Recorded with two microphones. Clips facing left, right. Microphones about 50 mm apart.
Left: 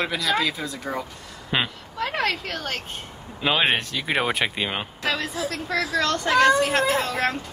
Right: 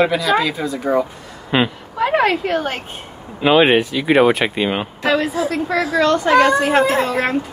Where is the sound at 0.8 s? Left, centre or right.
Centre.